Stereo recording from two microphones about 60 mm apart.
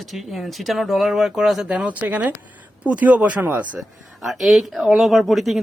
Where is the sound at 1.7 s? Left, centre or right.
Centre.